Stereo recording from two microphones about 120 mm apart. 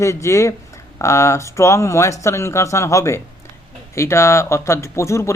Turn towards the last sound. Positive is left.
turn(degrees=25)  # may be behind; listen again after turning